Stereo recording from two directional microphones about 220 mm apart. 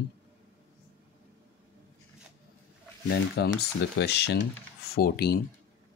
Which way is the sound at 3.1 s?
50° left (ahead or behind).